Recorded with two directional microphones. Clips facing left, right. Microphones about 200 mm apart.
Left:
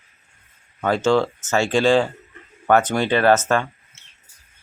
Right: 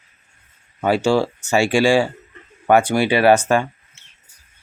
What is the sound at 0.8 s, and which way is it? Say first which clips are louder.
Speech: right 1 dB; 10° right (ahead or behind).